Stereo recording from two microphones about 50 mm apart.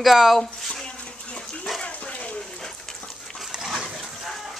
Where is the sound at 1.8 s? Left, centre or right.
Left.